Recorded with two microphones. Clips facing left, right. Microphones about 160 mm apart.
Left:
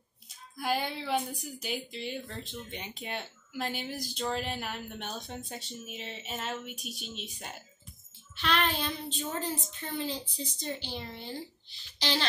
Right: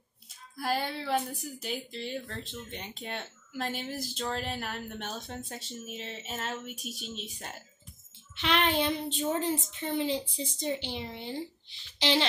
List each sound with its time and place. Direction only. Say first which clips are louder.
0.6 s a woman's voice: even; centre (ahead or behind)
8.4 s speech: right 3 dB; 20° right (ahead or behind)